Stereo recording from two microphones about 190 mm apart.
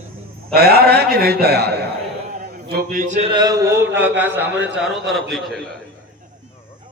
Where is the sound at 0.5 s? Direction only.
55° right (ahead or behind); by 3.3 s 35° right (ahead or behind).